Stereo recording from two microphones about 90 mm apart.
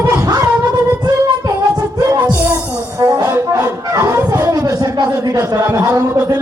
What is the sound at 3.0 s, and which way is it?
Brass instrument, 45° right (ahead or behind).